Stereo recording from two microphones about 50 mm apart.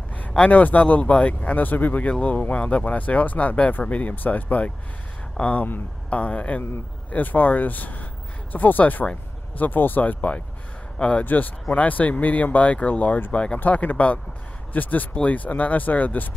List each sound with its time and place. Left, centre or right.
0.4 s speech: left
11.0 s speech: centre
11.2 s speech: left
13.6 s speech: left